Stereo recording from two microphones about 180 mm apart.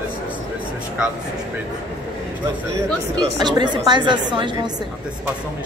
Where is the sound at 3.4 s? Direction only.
25° right (ahead or behind).